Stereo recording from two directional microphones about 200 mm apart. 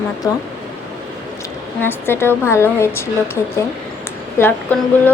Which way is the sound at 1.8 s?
10° left (ahead or behind).